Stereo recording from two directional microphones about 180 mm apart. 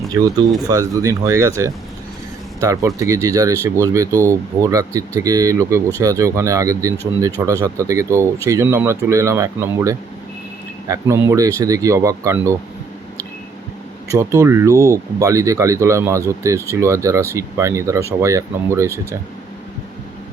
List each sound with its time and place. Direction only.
0.7 s speech: 20° right (ahead or behind)
14.1 s speech: 15° right (ahead or behind)